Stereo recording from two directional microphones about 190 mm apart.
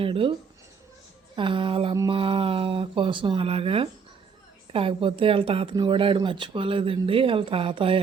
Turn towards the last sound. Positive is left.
turn(degrees=-30)  # may be behind; listen again after turning